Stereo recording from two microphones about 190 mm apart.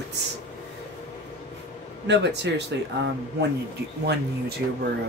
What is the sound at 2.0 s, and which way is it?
A man's voice, 65° right (ahead or behind).